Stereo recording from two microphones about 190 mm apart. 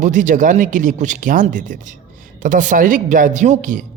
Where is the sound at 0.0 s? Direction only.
40° right (ahead or behind).